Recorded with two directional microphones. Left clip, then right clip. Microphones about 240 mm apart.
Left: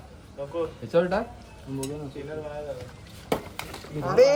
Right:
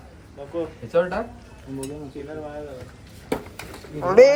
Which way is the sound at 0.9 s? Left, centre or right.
Left.